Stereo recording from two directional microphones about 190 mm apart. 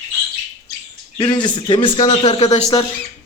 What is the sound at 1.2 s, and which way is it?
A man's voice, 25° left (ahead or behind).